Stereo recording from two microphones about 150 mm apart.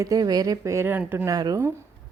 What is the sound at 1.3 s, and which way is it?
Speech, 25° right (ahead or behind).